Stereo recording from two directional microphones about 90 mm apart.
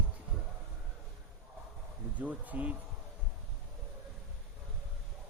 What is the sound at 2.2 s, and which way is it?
Speech, 15° right (ahead or behind).